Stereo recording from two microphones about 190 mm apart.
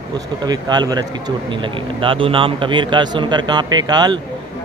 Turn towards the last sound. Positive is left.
turn(degrees=-20)  # may be behind; listen again after turning